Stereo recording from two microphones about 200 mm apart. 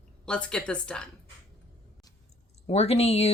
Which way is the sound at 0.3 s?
5° left (ahead or behind).